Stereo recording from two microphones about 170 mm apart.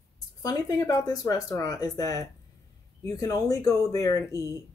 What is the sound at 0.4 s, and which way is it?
Speech, 20° left (ahead or behind).